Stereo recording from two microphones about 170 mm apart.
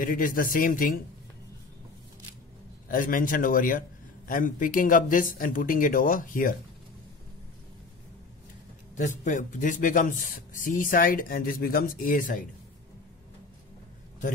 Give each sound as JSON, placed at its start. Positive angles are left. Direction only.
{"t": 0.0, "sound": "speech", "side_deg": 55}
{"t": 2.9, "sound": "speech", "side_deg": 55}
{"t": 9.2, "sound": "speech", "side_deg": 50}